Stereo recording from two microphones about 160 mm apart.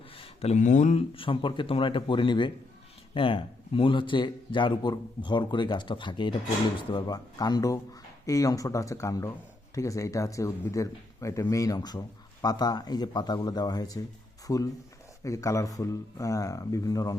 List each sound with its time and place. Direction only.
0.2 s a man's voice: 45° left (ahead or behind); by 17.2 s 20° left (ahead or behind)